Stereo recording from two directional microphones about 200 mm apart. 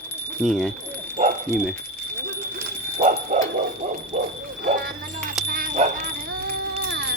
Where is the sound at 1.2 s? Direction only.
30° right (ahead or behind).